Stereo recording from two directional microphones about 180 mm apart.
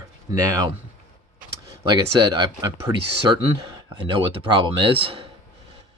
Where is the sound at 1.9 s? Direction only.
25° right (ahead or behind).